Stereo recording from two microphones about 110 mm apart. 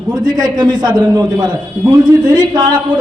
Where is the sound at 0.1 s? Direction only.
40° right (ahead or behind).